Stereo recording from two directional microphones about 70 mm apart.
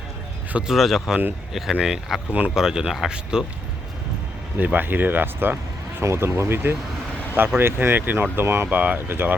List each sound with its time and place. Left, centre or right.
0.7 s speech: centre
1.7 s speech: centre
4.5 s speech: right
8.6 s speech: right